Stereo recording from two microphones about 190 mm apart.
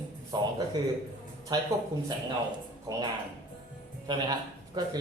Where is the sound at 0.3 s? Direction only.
20° right (ahead or behind).